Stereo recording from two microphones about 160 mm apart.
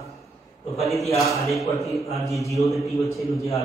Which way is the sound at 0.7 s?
Centre (ahead or behind).